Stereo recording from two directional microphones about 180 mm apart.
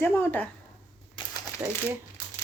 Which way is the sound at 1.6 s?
15° right (ahead or behind).